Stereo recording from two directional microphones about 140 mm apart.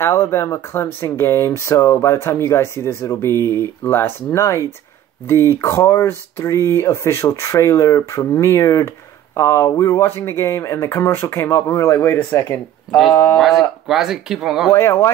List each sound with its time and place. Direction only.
0.0 s speech: 20° left (ahead or behind)
13.4 s speech: centre (ahead or behind)
14.7 s speech: 20° left (ahead or behind)